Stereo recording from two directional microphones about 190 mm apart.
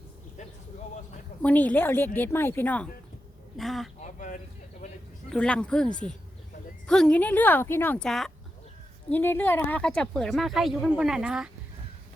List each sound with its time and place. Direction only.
1.4 s speech: 10° left (ahead or behind)
4.0 s a sound: 45° left (ahead or behind)
5.3 s speech: 5° left (ahead or behind)